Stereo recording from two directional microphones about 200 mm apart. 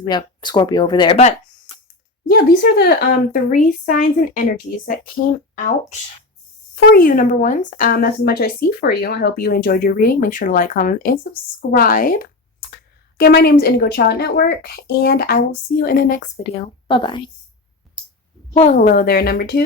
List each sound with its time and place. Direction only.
0.0 s speech: 20° left (ahead or behind)
2.3 s a woman's voice: 50° left (ahead or behind)
6.7 s a woman's voice: 50° left (ahead or behind)
16.6 s speech: 25° left (ahead or behind)
18.5 s a woman's voice: 35° left (ahead or behind); by 19.6 s 50° left (ahead or behind)